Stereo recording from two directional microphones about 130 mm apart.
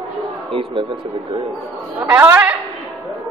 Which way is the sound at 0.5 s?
45° right (ahead or behind).